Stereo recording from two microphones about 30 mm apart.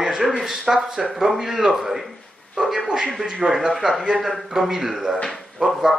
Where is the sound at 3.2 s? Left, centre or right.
Centre.